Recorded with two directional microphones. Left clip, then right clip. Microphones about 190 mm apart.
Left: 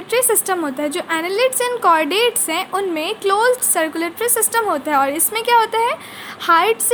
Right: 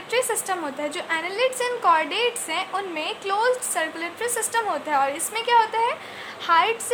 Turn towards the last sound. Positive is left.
turn(degrees=35)  # may be behind; listen again after turning